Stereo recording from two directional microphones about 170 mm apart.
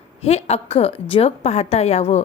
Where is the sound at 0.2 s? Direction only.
40° left (ahead or behind).